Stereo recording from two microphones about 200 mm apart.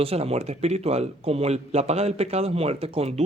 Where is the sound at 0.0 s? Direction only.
30° right (ahead or behind).